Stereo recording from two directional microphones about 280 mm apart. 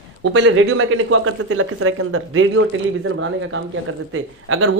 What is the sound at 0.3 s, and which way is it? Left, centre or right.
Speech, right.